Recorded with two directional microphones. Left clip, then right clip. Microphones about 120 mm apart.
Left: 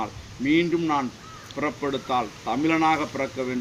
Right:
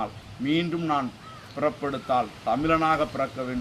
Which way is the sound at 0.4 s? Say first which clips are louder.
Left 4 dB; 40° right (ahead or behind).